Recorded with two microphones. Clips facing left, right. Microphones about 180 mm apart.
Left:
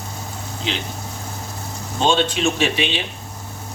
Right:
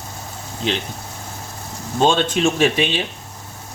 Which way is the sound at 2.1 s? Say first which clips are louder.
Right 1 dB; 50° right (ahead or behind).